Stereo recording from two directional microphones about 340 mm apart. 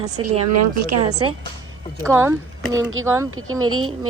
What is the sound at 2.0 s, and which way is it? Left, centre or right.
Speech, centre.